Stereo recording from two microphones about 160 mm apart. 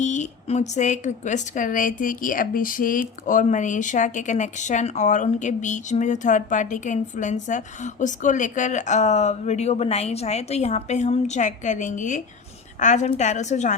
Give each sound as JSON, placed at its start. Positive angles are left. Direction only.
{"t": 0.0, "sound": "a woman's voice", "side_deg": 50}